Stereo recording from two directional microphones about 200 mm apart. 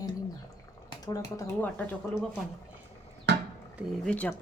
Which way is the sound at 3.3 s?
60° right (ahead or behind).